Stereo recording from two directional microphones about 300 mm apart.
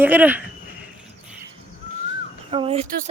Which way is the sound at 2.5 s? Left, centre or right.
Centre.